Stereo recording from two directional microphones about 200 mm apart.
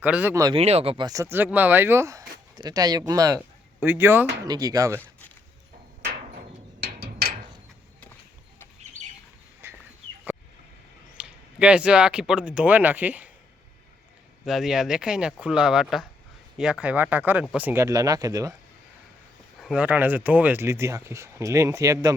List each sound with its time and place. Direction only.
0.0 s speech: 10° right (ahead or behind)
0.5 s speech: 30° right (ahead or behind)
7.0 s a sound: 50° right (ahead or behind)
8.8 s a sound: 35° right (ahead or behind)
9.6 s chicken: 10° right (ahead or behind)
11.2 s speech: 5° right (ahead or behind)
14.4 s speech: centre (ahead or behind); by 18.5 s 15° right (ahead or behind)
19.6 s speech: 5° right (ahead or behind)